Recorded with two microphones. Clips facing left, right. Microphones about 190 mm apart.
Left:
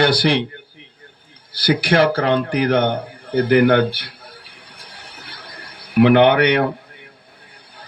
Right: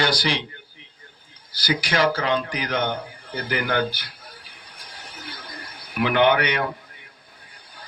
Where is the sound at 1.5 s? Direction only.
60° left (ahead or behind).